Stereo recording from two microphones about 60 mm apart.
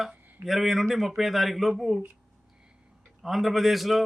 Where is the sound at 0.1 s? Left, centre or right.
Right.